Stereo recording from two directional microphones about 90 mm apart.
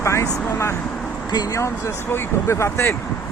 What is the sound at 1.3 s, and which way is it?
Speech, 45° left (ahead or behind).